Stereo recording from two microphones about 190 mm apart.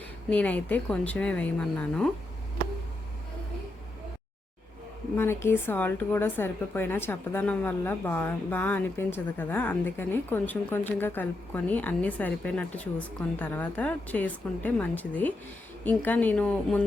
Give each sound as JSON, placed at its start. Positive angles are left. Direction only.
{"t": 0.3, "sound": "a woman's voice", "side_deg": 5}
{"t": 5.1, "sound": "a woman's voice", "side_deg": 10}